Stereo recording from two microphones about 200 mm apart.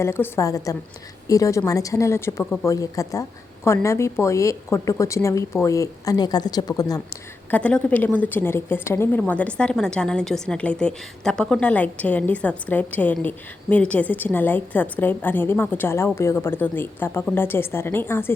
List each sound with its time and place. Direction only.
0.0 s a woman's voice: 10° left (ahead or behind)
7.5 s a woman's voice: 5° left (ahead or behind)